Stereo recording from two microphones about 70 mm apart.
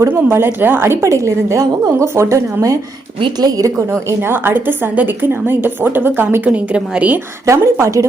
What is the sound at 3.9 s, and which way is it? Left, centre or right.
A woman's voice, right.